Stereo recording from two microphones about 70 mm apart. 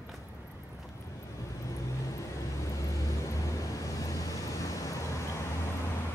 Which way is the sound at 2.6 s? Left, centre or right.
Left.